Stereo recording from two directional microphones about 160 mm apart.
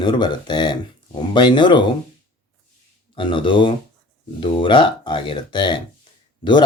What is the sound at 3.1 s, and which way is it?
Speech, 30° left (ahead or behind).